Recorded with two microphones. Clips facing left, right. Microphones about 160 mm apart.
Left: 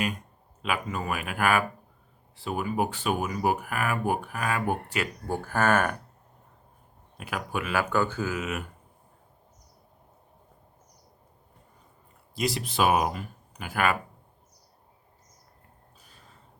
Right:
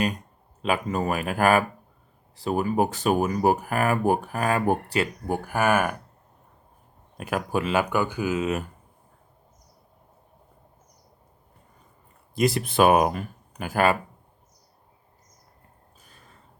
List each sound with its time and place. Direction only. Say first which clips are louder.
0.6 s speech: right 6 dB; 35° right (ahead or behind)
5.3 s speech: right 1 dB; 15° right (ahead or behind)
7.2 s speech: right 6 dB; 45° right (ahead or behind)
7.6 s speech: even; 20° right (ahead or behind)
8.4 s speech: right 6 dB; 35° right (ahead or behind)
12.3 s speech: right 6 dB; 50° right (ahead or behind)